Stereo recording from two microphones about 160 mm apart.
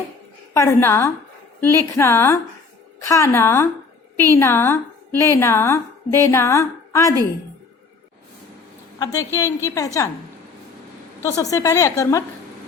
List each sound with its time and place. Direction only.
0.5 s a woman's voice: 20° left (ahead or behind)
9.0 s a woman's voice: 20° left (ahead or behind)
11.2 s a woman's voice: 20° left (ahead or behind)